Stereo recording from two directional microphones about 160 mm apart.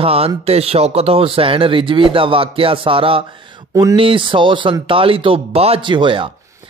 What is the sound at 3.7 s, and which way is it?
Speech, 20° right (ahead or behind).